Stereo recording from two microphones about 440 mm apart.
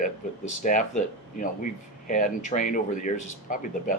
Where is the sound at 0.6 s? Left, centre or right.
Centre.